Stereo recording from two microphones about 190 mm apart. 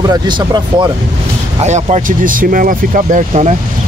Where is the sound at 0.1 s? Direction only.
25° right (ahead or behind).